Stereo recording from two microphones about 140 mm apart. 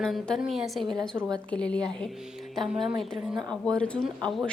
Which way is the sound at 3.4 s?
30° right (ahead or behind).